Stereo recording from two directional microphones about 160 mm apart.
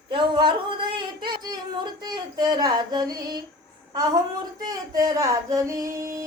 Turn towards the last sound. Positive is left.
turn(degrees=-20)  # may be behind; listen again after turning